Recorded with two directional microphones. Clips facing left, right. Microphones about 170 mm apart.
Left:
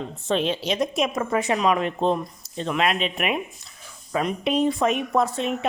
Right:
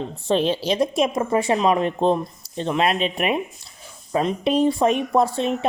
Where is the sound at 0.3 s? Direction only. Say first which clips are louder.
Right 3 dB; 35° right (ahead or behind).